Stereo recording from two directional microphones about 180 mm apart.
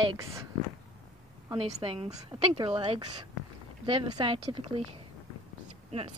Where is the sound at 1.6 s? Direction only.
35° right (ahead or behind).